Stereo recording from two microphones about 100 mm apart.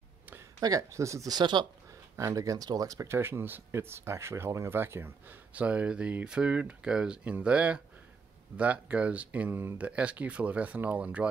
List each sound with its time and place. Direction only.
0.6 s speech: 35° right (ahead or behind)
2.1 s speech: 35° right (ahead or behind); by 11.2 s 15° right (ahead or behind)